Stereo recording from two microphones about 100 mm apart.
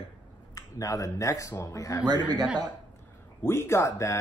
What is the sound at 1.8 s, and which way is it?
Speech, 35° left (ahead or behind).